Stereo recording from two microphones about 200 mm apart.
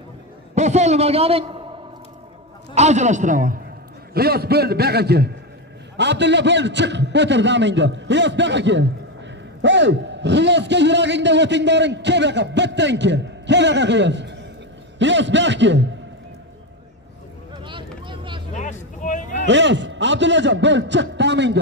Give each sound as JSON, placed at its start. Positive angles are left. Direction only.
{"t": 0.6, "sound": "a man's voice", "side_deg": -35}
{"t": 2.7, "sound": "a man's voice", "side_deg": -35}
{"t": 17.6, "sound": "vehicle", "side_deg": -25}
{"t": 18.5, "sound": "vehicle", "side_deg": 40}
{"t": 19.3, "sound": "a man's voice", "side_deg": -65}